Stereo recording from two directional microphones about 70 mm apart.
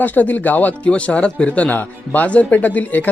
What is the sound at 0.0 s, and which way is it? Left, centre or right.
Speech, left.